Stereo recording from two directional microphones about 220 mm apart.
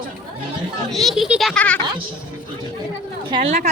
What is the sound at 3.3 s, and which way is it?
Speech, 30° right (ahead or behind).